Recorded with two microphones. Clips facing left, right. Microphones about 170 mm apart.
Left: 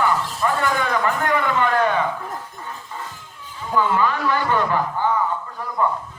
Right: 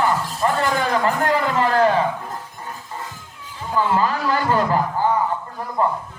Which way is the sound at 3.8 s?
35° right (ahead or behind).